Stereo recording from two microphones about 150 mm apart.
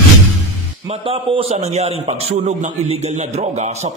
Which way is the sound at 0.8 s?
35° right (ahead or behind).